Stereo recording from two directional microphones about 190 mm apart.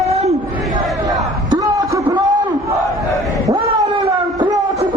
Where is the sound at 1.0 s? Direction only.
20° right (ahead or behind).